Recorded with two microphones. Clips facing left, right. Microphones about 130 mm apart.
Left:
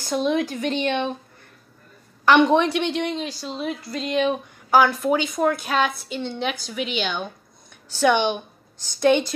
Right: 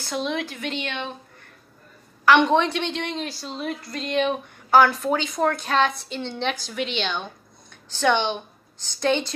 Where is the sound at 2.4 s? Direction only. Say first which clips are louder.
Left 2 dB; 15° left (ahead or behind).